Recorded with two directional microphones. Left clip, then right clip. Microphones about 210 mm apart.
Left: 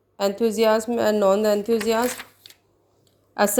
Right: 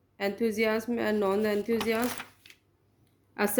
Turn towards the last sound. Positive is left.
turn(degrees=20)  # may be behind; listen again after turning